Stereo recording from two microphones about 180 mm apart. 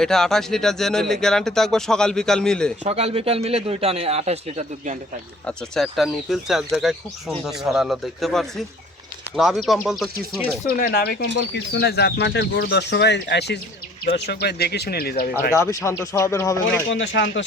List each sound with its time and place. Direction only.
0.0 s speech: 5° left (ahead or behind)
2.8 s speech: 35° right (ahead or behind)
5.5 s speech: centre (ahead or behind)
10.7 s speech: 55° left (ahead or behind)
11.3 s speech: 70° left (ahead or behind)
14.0 s speech: 60° left (ahead or behind)
15.5 s speech: 15° left (ahead or behind)
16.9 s speech: 85° left